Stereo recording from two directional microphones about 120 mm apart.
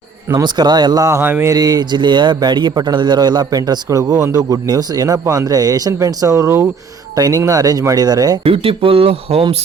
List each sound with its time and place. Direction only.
0.4 s speech: 35° right (ahead or behind); by 1.5 s 20° right (ahead or behind)
1.5 s a man's voice: 35° right (ahead or behind)
8.4 s speech: 50° right (ahead or behind)